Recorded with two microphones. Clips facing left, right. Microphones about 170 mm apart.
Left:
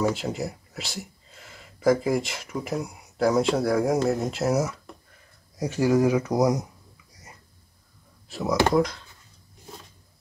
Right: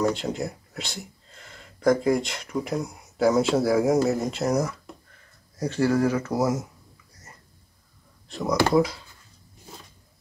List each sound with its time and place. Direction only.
0.0 s speech: 5° left (ahead or behind)
8.3 s speech: centre (ahead or behind)